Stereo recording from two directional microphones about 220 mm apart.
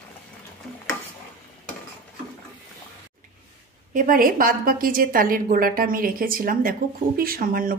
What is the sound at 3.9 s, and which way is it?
A woman's voice, 40° right (ahead or behind).